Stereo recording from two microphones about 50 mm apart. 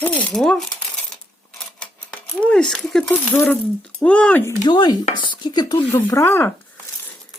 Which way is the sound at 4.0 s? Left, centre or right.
Left.